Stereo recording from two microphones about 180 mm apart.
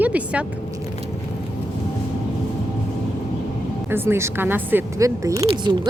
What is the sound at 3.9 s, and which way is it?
A woman's voice, 15° right (ahead or behind).